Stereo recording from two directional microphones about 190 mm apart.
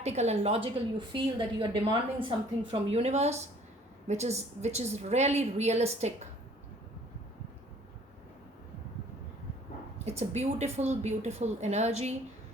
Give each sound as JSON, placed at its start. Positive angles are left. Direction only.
{"t": 0.0, "sound": "a woman's voice", "side_deg": -35}
{"t": 10.1, "sound": "a woman's voice", "side_deg": -35}